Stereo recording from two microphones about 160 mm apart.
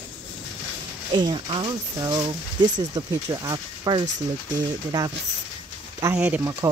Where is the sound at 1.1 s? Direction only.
25° right (ahead or behind).